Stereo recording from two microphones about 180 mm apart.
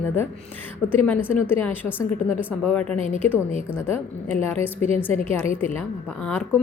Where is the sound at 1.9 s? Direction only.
10° right (ahead or behind).